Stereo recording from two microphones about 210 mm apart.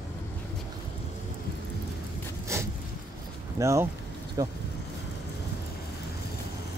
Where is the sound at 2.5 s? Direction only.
15° right (ahead or behind).